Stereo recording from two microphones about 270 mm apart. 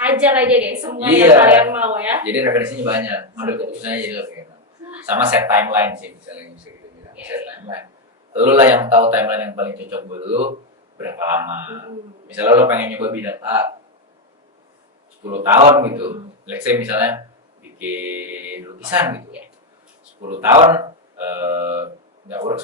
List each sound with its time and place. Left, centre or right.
0.2 s a woman's voice: centre
7.7 s a sound: centre
8.5 s a woman's voice: centre
9.9 s speech: right
11.0 s a woman's voice: centre
15.4 s a woman's voice: centre
20.3 s a woman's voice: centre